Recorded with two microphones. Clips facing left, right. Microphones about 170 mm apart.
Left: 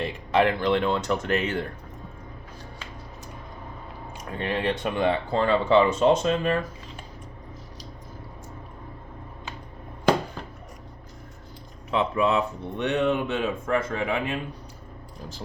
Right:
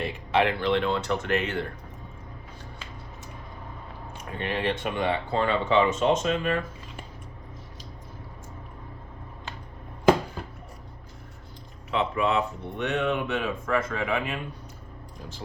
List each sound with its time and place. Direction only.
0.3 s speech: 40° left (ahead or behind)
4.4 s speech: 35° left (ahead or behind)
11.9 s speech: 35° left (ahead or behind)